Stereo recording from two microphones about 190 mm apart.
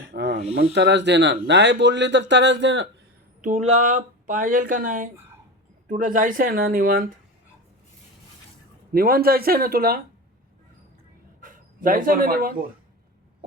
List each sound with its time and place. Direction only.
0.1 s snake: 65° right (ahead or behind)
0.7 s speech: 65° right (ahead or behind)
3.4 s speech: 40° right (ahead or behind)
8.9 s speech: 50° right (ahead or behind)
11.3 s speech: 45° right (ahead or behind)